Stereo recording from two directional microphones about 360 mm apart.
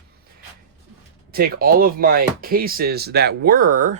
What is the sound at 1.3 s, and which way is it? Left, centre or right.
Speech, right.